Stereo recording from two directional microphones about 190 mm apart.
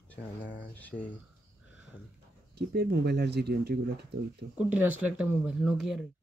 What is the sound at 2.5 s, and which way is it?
Speech, 60° right (ahead or behind).